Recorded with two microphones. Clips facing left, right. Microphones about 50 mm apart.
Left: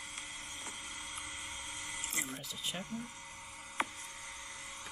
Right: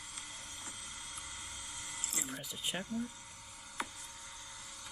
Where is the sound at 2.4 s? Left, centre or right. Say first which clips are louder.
Right 1 dB; right.